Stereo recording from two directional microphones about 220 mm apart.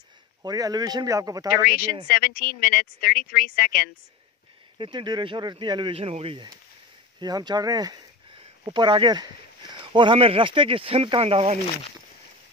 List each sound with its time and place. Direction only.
0.4 s speech: 15° right (ahead or behind)
1.6 s speech: 40° left (ahead or behind)
4.7 s speech: 20° right (ahead or behind)